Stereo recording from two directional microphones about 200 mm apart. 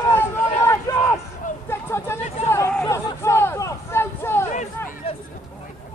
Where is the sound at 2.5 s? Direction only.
15° left (ahead or behind).